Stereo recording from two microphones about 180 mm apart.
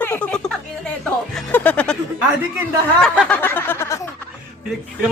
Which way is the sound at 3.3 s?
10° left (ahead or behind).